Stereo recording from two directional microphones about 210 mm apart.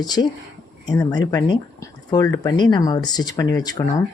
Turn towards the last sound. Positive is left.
turn(degrees=15)  # may be behind; listen again after turning